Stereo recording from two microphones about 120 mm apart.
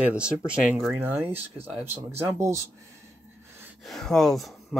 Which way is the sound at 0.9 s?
15° right (ahead or behind).